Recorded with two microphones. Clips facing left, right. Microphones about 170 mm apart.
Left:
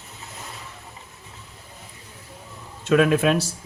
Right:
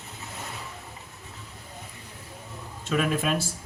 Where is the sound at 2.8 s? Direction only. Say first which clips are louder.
Left 8 dB; 85° left.